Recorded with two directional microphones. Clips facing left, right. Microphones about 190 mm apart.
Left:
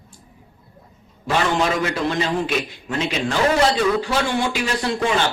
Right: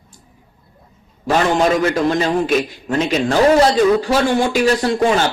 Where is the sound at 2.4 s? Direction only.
40° right (ahead or behind).